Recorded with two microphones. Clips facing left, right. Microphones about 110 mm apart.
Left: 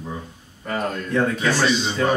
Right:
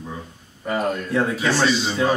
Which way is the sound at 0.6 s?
10° right (ahead or behind).